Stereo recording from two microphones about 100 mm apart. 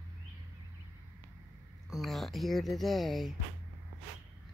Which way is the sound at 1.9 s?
Centre (ahead or behind).